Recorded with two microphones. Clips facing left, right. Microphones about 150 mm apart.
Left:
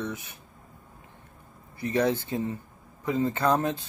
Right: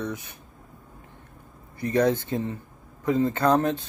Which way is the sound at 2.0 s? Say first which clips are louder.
Right 3 dB; 10° left (ahead or behind).